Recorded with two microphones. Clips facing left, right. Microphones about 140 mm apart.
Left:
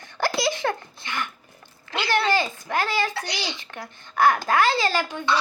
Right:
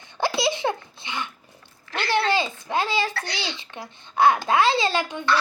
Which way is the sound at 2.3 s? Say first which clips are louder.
Even; 20° right (ahead or behind).